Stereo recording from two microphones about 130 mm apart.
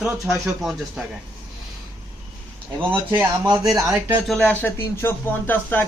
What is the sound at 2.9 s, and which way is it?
Speech, 15° right (ahead or behind).